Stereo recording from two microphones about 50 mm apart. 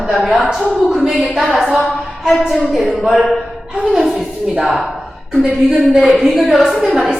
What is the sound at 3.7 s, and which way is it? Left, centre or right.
Speech, centre.